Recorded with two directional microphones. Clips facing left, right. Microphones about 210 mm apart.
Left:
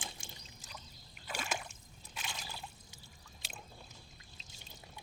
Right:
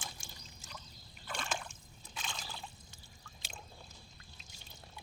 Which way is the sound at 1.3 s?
10° left (ahead or behind).